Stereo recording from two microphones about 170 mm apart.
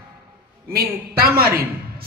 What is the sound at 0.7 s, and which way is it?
Speech, 65° right (ahead or behind).